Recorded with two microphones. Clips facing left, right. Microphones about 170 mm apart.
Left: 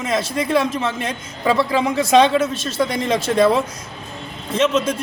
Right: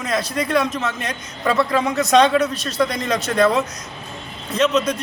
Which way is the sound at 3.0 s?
30° left (ahead or behind).